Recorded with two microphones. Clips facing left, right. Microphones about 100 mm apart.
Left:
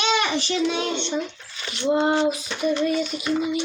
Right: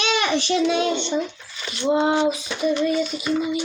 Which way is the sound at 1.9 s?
15° right (ahead or behind).